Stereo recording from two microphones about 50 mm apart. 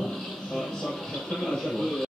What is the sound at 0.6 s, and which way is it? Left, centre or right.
Speech, centre.